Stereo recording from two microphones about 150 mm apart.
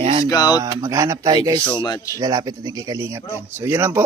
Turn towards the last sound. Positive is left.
turn(degrees=-15)  # may be behind; listen again after turning